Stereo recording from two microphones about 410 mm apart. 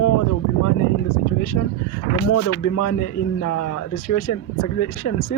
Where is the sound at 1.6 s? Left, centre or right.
Left.